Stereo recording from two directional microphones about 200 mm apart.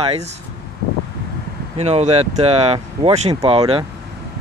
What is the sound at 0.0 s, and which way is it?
Speech, 30° right (ahead or behind).